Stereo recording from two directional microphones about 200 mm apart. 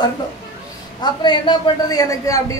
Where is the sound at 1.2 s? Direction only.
25° left (ahead or behind).